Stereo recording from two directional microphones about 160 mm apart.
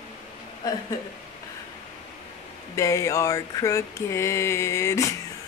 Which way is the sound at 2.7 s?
20° left (ahead or behind).